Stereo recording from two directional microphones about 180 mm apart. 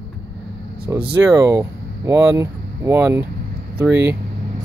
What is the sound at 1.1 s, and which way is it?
Speech, 15° right (ahead or behind).